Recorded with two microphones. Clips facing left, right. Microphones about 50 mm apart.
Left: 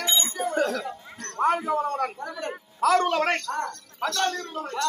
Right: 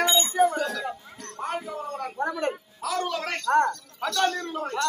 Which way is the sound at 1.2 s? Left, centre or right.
Left.